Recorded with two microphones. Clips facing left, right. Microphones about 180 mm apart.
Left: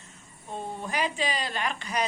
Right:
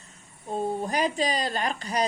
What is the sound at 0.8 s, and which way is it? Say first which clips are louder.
A woman's voice: left 1 dB; 40° right (ahead or behind).